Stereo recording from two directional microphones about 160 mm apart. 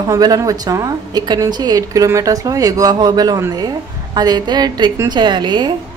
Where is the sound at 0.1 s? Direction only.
20° right (ahead or behind).